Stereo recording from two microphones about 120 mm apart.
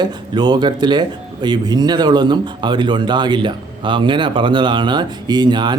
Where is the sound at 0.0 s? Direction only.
35° right (ahead or behind).